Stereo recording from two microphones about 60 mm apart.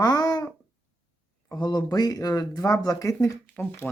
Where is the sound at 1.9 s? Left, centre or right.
Left.